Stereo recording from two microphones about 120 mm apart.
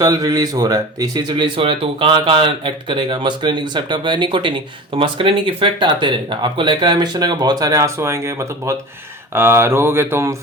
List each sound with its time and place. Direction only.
0.0 s speech: 30° right (ahead or behind)
9.3 s mantra: 20° right (ahead or behind)